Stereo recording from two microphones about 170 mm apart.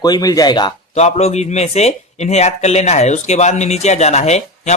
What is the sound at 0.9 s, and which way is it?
Speech, 40° left (ahead or behind).